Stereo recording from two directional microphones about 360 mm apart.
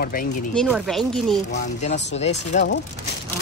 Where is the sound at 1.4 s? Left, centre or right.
Centre.